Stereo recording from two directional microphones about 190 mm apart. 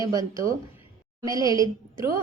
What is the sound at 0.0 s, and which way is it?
A woman's voice, 20° right (ahead or behind).